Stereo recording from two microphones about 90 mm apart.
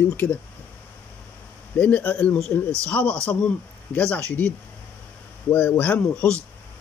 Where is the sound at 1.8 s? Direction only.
15° left (ahead or behind).